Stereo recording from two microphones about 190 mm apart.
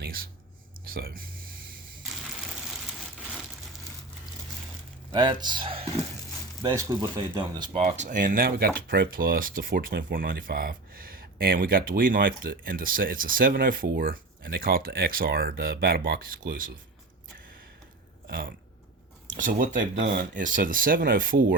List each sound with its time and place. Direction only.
0.0 s a sound: 50° right (ahead or behind)
5.1 s speech: 20° right (ahead or behind)
7.8 s speech: 40° right (ahead or behind)
18.3 s speech: 50° right (ahead or behind)